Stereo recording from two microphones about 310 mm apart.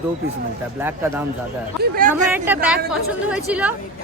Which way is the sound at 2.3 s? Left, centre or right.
Centre.